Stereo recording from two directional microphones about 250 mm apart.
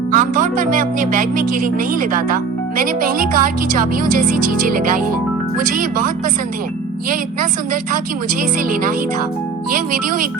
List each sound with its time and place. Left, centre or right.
0.1 s speech: right
8.4 s speech: right